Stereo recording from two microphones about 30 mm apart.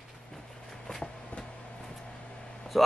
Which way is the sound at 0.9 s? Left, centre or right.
Left.